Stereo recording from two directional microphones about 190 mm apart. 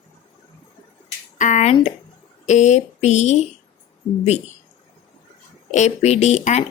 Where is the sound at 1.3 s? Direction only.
40° left (ahead or behind).